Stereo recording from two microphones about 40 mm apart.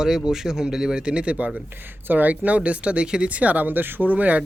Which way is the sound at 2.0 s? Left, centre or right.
Right.